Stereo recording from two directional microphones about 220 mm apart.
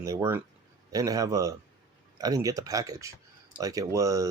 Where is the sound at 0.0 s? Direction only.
15° right (ahead or behind).